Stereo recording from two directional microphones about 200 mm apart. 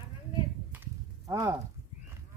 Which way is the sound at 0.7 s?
15° right (ahead or behind).